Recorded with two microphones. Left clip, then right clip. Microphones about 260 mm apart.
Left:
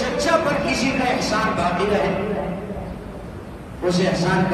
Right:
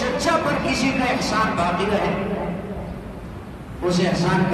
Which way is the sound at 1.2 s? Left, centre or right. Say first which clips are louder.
Even; right.